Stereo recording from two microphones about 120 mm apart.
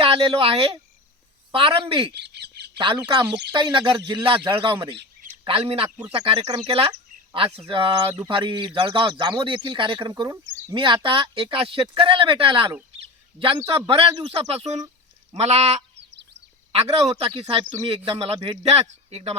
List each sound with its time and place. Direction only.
0.0 s a man's voice: 50° right (ahead or behind); by 10.8 s 30° right (ahead or behind)
10.8 s a man's voice: 45° right (ahead or behind)
13.7 s a man's voice: 50° right (ahead or behind); by 14.8 s 65° right (ahead or behind)
15.4 s goose: 70° right (ahead or behind)
16.7 s speech: 55° right (ahead or behind)
17.5 s a man's voice: 45° right (ahead or behind)